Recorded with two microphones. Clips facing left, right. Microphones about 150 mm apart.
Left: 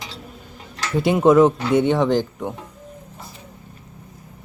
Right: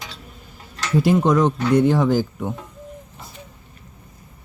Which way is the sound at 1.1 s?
5° left (ahead or behind).